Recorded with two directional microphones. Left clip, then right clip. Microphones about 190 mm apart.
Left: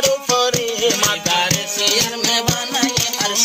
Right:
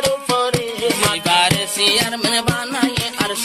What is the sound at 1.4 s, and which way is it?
Music, 45° right (ahead or behind).